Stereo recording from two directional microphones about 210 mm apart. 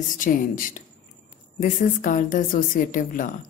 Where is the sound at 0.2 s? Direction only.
40° left (ahead or behind).